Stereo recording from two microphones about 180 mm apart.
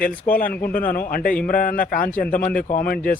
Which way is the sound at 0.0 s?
50° left (ahead or behind).